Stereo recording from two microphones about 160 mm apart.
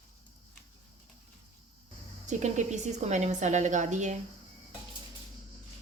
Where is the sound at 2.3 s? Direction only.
50° right (ahead or behind).